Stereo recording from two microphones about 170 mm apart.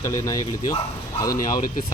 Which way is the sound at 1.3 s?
50° left (ahead or behind).